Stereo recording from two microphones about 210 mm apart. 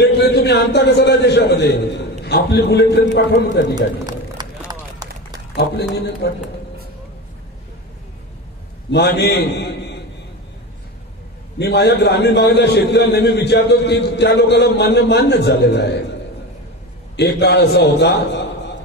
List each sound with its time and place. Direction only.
0.0 s a man's voice: 50° left (ahead or behind)
3.7 s a sound: 20° right (ahead or behind)
4.6 s run: 20° right (ahead or behind)
5.6 s a man's voice: 55° left (ahead or behind)
8.9 s a man's voice: 50° left (ahead or behind)
11.5 s a man's voice: 55° left (ahead or behind)
17.2 s a man's voice: 55° left (ahead or behind)